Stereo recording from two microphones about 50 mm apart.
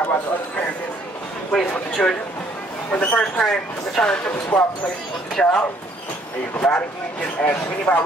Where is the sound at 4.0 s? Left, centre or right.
Centre.